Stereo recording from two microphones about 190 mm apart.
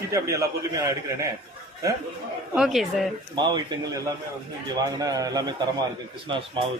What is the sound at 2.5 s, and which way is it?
Speech, centre (ahead or behind).